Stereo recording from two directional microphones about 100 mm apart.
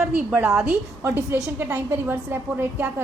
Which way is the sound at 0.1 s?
15° right (ahead or behind).